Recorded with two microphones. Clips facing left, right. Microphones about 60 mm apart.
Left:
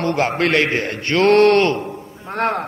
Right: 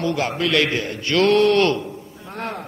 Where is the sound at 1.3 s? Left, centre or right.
Left.